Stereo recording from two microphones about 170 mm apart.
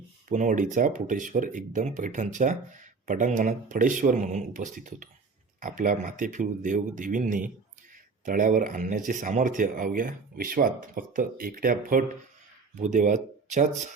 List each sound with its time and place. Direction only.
0.3 s speech: 45° right (ahead or behind)